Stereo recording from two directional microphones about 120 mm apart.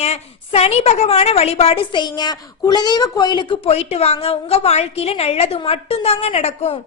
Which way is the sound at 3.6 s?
60° left (ahead or behind).